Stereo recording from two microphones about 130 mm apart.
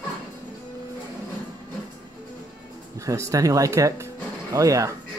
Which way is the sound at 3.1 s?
25° right (ahead or behind).